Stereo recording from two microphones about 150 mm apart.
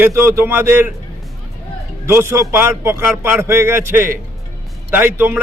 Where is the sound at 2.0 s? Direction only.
15° right (ahead or behind).